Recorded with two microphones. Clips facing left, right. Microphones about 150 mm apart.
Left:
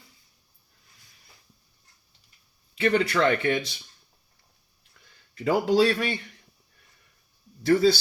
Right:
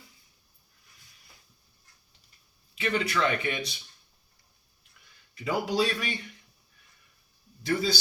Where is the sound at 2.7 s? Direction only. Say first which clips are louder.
Left 7 dB; 45° left (ahead or behind).